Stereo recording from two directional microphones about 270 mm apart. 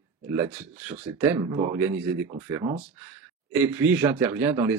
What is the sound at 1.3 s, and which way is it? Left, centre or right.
Speech, centre.